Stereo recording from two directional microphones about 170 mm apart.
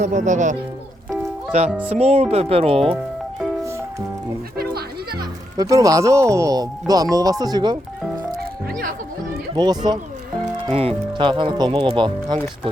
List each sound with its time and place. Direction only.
0.0 s speech: 45° right (ahead or behind)
1.5 s speech: 40° right (ahead or behind)
4.5 s goat: 65° right (ahead or behind)
5.5 s speech: 20° right (ahead or behind)
9.6 s speech: 25° right (ahead or behind)